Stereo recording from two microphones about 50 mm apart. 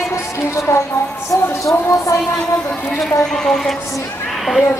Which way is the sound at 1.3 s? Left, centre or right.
Left.